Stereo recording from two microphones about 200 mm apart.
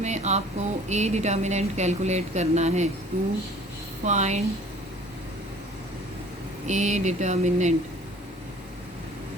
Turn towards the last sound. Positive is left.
turn(degrees=-35)  # may be behind; listen again after turning